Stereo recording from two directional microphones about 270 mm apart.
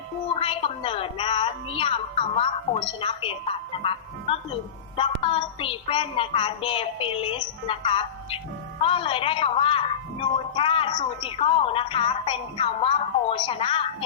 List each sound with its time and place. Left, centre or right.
0.3 s a woman's voice: centre